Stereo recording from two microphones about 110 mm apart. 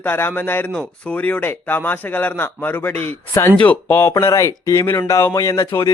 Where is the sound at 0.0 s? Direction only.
20° left (ahead or behind).